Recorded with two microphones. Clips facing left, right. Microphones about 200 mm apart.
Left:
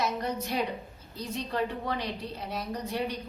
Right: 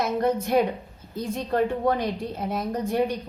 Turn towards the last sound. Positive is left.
turn(degrees=-50)  # may be behind; listen again after turning